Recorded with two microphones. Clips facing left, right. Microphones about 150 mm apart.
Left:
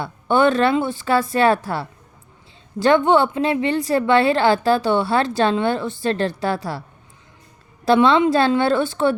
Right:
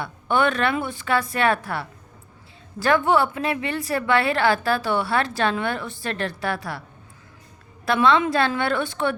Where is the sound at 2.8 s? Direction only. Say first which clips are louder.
Left 4 dB; 25° left (ahead or behind).